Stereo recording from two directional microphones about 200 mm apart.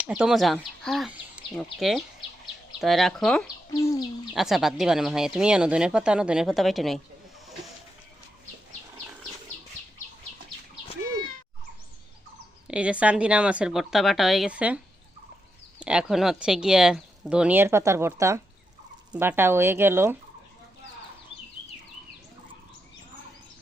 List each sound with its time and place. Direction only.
0.0 s speech: 5° right (ahead or behind)
3.7 s bird: 15° left (ahead or behind)
4.4 s speech: centre (ahead or behind)
12.6 s speech: 5° right (ahead or behind)
15.8 s speech: 5° right (ahead or behind)